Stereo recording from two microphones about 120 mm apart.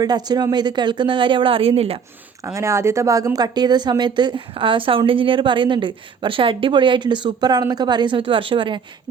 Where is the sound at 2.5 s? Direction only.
25° right (ahead or behind).